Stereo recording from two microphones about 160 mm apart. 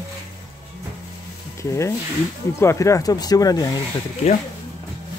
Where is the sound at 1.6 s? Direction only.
20° left (ahead or behind).